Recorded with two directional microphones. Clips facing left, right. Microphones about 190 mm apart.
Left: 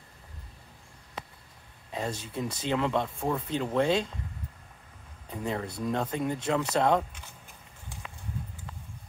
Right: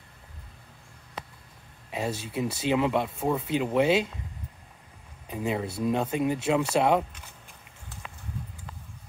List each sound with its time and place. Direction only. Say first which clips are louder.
1.9 s speech: right 3 dB; 10° right (ahead or behind)
5.3 s speech: right 3 dB; 10° right (ahead or behind)